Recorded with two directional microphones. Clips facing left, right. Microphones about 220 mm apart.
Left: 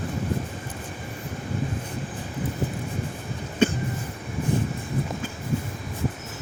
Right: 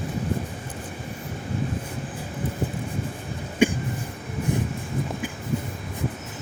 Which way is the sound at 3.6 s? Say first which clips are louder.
Right 1 dB; 10° right (ahead or behind).